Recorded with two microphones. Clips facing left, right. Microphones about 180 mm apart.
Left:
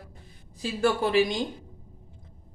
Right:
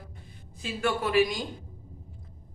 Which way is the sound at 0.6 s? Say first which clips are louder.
Left 4 dB; 30° left (ahead or behind).